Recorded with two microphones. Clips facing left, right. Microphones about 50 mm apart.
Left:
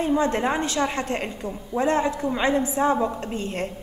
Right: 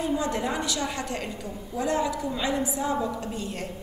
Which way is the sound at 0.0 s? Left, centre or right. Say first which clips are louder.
Left 5 dB; left.